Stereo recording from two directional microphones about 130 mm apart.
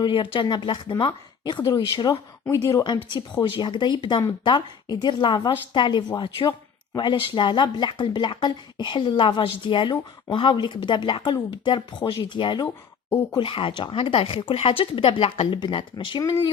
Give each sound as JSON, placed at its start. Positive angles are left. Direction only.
{"t": 0.0, "sound": "speech", "side_deg": 40}